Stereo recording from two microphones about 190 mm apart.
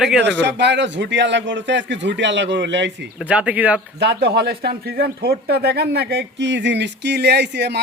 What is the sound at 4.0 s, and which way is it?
Speech, 60° right (ahead or behind).